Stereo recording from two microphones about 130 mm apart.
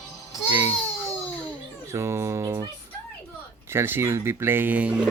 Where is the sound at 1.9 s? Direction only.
20° right (ahead or behind).